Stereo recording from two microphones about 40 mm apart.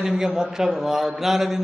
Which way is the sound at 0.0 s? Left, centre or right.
Centre.